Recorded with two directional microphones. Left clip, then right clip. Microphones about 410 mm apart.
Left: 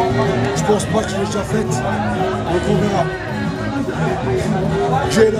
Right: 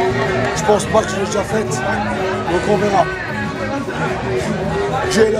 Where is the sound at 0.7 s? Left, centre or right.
Centre.